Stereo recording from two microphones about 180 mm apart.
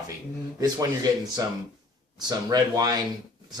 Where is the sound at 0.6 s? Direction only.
20° right (ahead or behind).